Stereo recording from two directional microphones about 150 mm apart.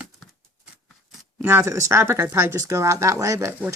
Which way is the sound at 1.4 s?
15° right (ahead or behind).